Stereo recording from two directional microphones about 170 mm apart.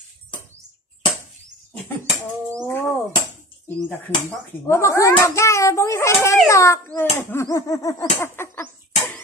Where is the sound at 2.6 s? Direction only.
15° left (ahead or behind).